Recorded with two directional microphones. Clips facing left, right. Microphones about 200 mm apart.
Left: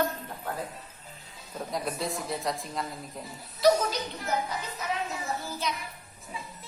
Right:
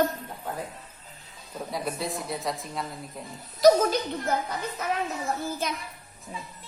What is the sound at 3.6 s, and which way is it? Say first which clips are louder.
Speech: right 4 dB; 40° right (ahead or behind).